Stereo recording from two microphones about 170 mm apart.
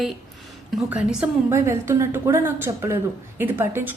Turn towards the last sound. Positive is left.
turn(degrees=-10)  # may be behind; listen again after turning